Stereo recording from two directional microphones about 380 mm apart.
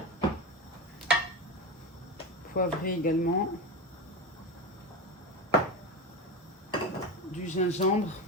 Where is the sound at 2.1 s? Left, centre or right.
Left.